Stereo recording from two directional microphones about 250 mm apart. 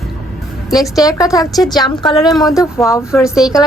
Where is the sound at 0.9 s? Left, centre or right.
Centre.